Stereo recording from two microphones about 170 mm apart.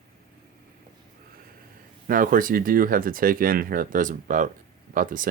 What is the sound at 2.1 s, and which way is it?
Speech, 55° right (ahead or behind).